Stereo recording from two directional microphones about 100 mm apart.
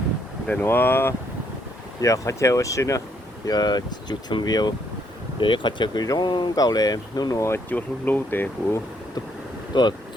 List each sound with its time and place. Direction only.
0.6 s speech: 20° left (ahead or behind)
2.0 s speech: 35° left (ahead or behind)
7.7 s speech: 15° left (ahead or behind)
9.7 s speech: 50° left (ahead or behind)